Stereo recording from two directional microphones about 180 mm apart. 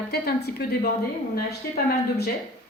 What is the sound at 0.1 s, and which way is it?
Speech, 60° left (ahead or behind).